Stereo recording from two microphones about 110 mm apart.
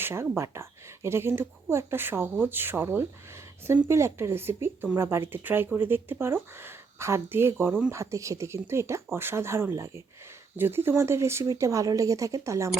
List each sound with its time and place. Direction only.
0.0 s speech: 25° right (ahead or behind)